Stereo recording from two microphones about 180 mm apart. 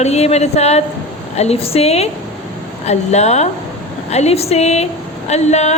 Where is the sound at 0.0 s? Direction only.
35° left (ahead or behind).